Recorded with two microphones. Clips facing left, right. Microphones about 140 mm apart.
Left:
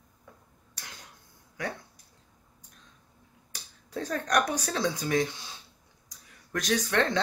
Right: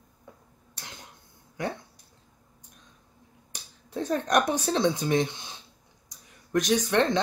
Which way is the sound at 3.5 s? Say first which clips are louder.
Right 2 dB; 20° right (ahead or behind).